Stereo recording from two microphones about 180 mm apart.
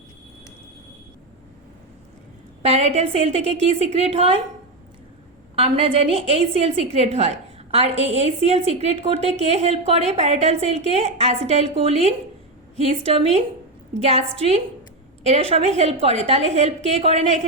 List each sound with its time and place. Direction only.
2.6 s a woman's voice: 35° right (ahead or behind)
5.5 s a woman's voice: 30° right (ahead or behind)
15.3 s a woman's voice: 35° right (ahead or behind)